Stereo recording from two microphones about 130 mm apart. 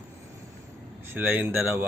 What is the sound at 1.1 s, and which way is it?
Speech, 15° right (ahead or behind).